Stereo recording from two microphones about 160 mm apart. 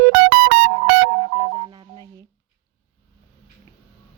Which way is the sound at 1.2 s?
25° right (ahead or behind).